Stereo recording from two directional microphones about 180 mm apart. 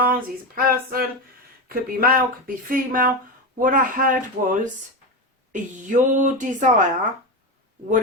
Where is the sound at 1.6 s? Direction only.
55° right (ahead or behind).